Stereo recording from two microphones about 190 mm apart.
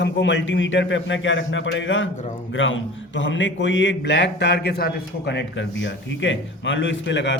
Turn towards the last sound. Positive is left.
turn(degrees=70)  # may be behind; listen again after turning